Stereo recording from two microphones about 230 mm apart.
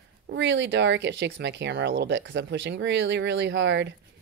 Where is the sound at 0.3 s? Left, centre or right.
Right.